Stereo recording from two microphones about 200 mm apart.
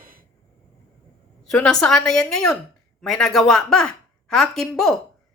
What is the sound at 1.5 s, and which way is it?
A woman's voice, 5° left (ahead or behind).